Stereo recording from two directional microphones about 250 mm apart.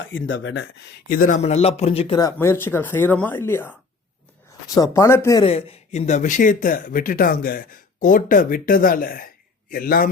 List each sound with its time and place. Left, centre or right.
0.0 s speech: left; by 3.7 s centre
4.7 s speech: centre
5.5 s speech: left